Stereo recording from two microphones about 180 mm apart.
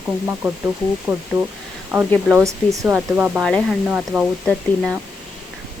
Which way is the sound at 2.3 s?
15° right (ahead or behind).